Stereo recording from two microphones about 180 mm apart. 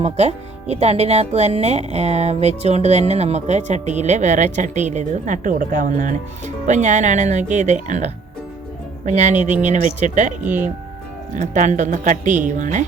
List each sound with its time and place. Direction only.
0.0 s speech: 35° right (ahead or behind)
11.3 s speech: 45° right (ahead or behind)